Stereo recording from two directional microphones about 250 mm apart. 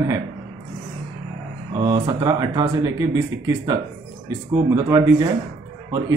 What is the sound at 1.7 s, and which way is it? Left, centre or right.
A man's voice, centre.